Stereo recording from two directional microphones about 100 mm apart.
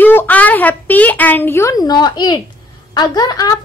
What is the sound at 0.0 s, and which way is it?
A woman's voice, 20° left (ahead or behind).